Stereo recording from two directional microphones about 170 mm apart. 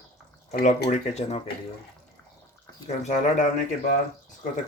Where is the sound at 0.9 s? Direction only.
40° left (ahead or behind).